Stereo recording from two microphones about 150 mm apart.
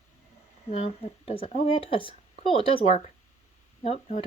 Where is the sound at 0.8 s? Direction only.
40° left (ahead or behind).